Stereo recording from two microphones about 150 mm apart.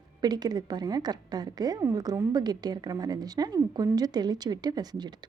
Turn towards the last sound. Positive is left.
turn(degrees=-25)  # may be behind; listen again after turning